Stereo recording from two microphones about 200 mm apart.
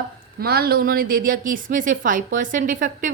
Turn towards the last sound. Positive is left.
turn(degrees=-40)  # may be behind; listen again after turning